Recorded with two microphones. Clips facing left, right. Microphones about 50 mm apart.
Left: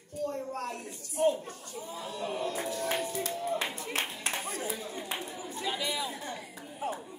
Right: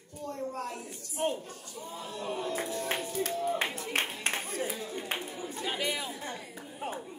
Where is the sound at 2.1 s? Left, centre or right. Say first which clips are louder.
Left 1 dB; right.